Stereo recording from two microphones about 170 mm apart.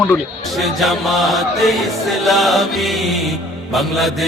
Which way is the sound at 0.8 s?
Centre (ahead or behind).